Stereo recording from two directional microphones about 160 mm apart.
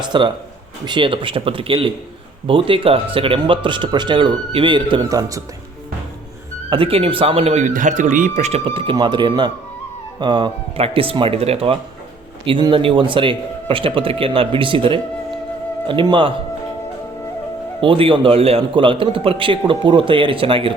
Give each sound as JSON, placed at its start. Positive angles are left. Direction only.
{"t": 0.1, "sound": "a man's voice", "side_deg": -30}
{"t": 6.7, "sound": "a man's voice", "side_deg": -35}
{"t": 17.7, "sound": "a man's voice", "side_deg": -35}